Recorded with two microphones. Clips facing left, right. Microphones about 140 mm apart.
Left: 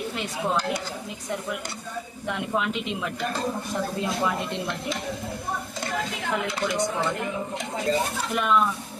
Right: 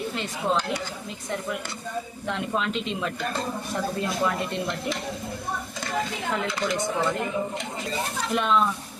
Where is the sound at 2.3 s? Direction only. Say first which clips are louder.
Left 1 dB; 15° left (ahead or behind).